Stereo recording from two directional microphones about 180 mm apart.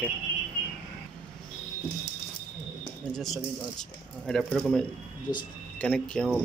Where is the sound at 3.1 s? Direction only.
Centre (ahead or behind).